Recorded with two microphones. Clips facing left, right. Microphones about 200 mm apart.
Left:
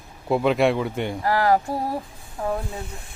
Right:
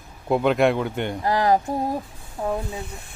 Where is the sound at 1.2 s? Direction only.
20° right (ahead or behind).